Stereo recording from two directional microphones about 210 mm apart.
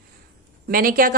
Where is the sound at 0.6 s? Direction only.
45° right (ahead or behind).